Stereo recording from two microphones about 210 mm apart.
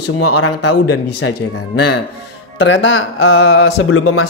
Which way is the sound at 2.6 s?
65° left (ahead or behind).